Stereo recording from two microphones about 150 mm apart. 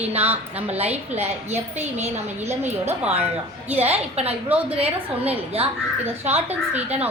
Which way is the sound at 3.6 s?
45° right (ahead or behind).